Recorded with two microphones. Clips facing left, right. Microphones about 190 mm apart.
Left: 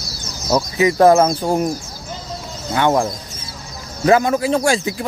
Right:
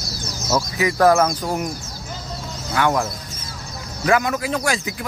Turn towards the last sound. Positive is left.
turn(degrees=30)  # may be behind; listen again after turning